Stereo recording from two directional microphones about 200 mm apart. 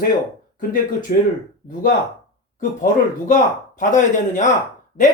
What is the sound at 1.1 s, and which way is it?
Speech, 45° left (ahead or behind).